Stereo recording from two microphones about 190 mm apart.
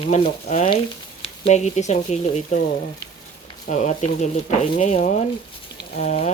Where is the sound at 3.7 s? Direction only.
40° left (ahead or behind).